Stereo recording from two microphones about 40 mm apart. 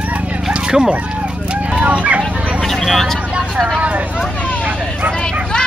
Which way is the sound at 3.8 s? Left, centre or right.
Right.